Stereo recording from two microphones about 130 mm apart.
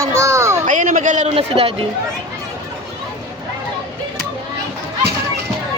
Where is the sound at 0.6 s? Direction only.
85° right.